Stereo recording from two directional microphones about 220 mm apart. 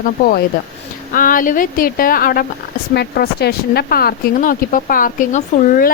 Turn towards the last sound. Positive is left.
turn(degrees=40)  # may be behind; listen again after turning